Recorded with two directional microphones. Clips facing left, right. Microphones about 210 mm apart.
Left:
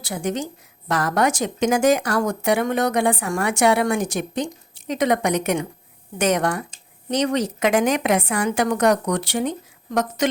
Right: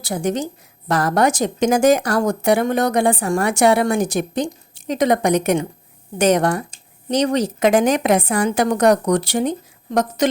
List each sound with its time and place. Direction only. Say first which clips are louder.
0.0 s speech: right 4 dB; 40° right (ahead or behind)